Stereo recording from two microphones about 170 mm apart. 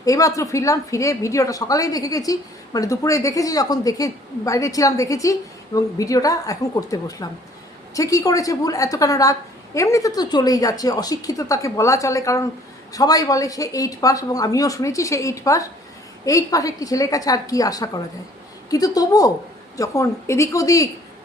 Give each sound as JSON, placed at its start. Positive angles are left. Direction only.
{"t": 0.0, "sound": "a woman's voice", "side_deg": 20}